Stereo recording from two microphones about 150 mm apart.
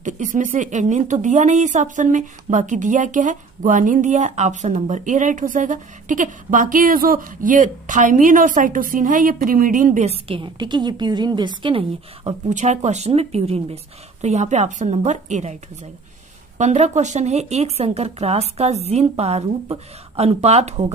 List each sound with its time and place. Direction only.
0.0 s a woman's voice: 55° right (ahead or behind); by 11.8 s 30° right (ahead or behind)
12.3 s speech: 50° right (ahead or behind)
16.5 s speech: 50° right (ahead or behind)